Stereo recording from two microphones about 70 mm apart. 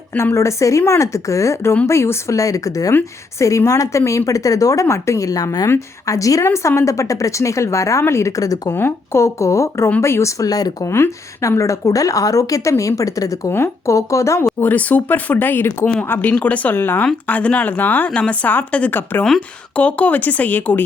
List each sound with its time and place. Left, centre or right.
0.2 s speech: left
6.4 s speech: left
8.4 s speech: left
8.7 s speech: left
10.4 s speech: left
10.8 s speech: left
14.6 s a woman's voice: left